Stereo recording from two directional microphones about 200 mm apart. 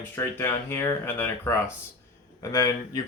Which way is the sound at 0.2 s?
10° left (ahead or behind).